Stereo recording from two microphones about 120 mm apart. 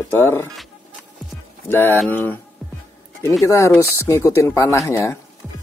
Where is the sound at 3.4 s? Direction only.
25° left (ahead or behind).